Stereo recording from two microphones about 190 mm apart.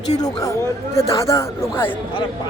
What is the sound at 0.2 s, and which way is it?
A woman's voice, 20° left (ahead or behind).